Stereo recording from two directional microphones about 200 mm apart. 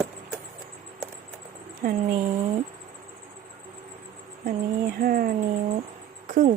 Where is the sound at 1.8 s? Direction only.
50° right (ahead or behind).